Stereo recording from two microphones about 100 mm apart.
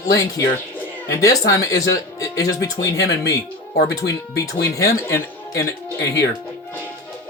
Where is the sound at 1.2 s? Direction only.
35° left (ahead or behind).